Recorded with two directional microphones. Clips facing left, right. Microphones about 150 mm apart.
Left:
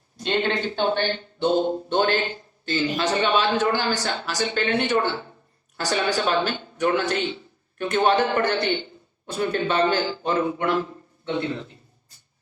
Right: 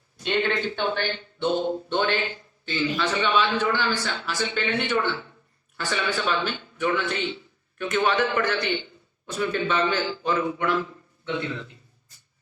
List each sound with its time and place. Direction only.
0.2 s speech: 30° left (ahead or behind)